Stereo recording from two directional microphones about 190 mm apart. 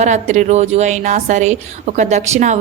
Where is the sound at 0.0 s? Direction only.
35° right (ahead or behind).